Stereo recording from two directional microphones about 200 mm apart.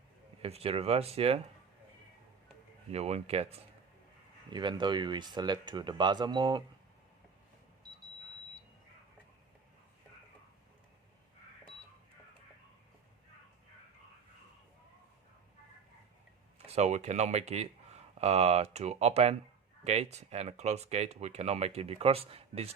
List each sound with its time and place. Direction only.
0.4 s speech: 30° right (ahead or behind)
2.9 s speech: 30° right (ahead or behind)
16.6 s speech: 30° right (ahead or behind)